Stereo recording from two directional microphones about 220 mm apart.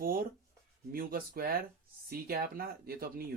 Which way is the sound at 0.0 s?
40° right (ahead or behind).